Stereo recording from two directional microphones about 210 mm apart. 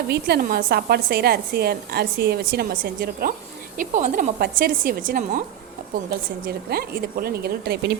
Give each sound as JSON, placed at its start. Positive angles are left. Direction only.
{"t": 0.1, "sound": "a woman's voice", "side_deg": -45}